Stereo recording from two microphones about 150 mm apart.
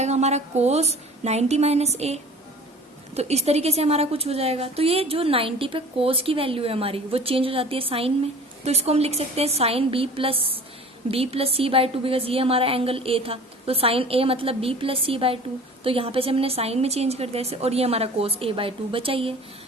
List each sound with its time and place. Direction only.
0.0 s a woman's voice: 45° right (ahead or behind)